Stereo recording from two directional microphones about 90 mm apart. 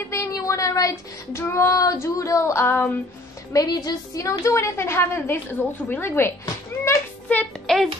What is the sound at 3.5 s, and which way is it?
A woman's voice, 45° left (ahead or behind).